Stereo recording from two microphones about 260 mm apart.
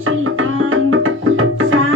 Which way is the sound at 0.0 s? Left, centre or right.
Right.